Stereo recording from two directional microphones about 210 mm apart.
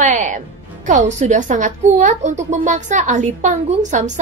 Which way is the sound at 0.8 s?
35° right (ahead or behind).